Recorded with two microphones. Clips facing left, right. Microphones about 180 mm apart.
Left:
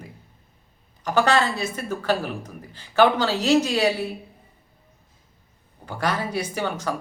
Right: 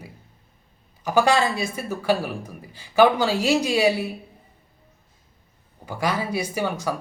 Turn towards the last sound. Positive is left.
turn(degrees=-10)  # may be behind; listen again after turning